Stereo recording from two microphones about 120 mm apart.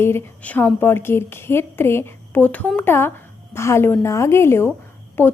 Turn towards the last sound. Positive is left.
turn(degrees=20)  # may be behind; listen again after turning